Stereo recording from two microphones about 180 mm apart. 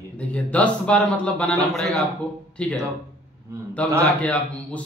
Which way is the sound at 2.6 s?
5° left (ahead or behind).